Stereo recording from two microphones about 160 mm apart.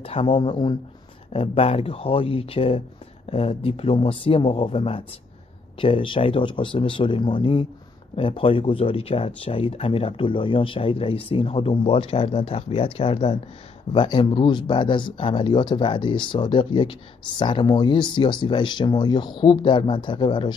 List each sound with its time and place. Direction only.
0.0 s speech: 35° left (ahead or behind)